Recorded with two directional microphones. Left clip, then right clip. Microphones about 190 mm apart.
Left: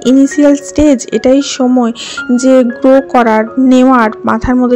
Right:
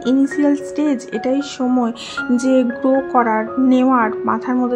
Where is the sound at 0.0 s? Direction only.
35° left (ahead or behind).